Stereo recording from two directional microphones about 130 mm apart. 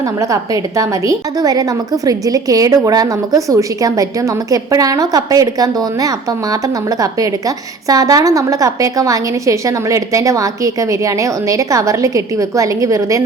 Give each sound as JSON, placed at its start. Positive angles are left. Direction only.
{"t": 0.0, "sound": "a woman's voice", "side_deg": -25}